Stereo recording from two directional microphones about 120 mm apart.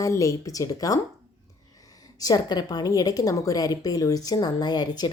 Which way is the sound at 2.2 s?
35° left (ahead or behind).